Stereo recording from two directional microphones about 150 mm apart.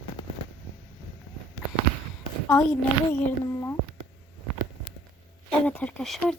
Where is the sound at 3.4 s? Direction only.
15° left (ahead or behind).